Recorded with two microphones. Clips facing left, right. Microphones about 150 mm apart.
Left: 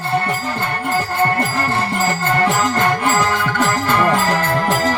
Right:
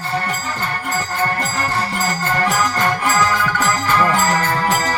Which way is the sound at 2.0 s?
55° left (ahead or behind).